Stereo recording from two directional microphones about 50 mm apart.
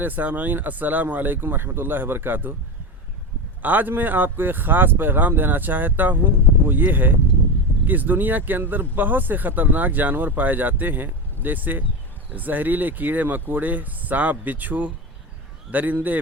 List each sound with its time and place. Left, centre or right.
0.0 s speech: right
3.6 s speech: right